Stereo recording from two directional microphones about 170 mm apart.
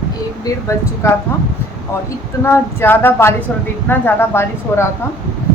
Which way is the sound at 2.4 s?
15° left (ahead or behind).